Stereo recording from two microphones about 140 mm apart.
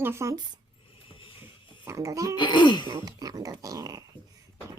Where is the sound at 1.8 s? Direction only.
20° right (ahead or behind).